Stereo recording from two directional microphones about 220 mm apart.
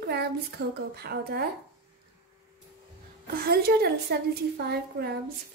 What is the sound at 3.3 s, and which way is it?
A woman's voice, 45° right (ahead or behind).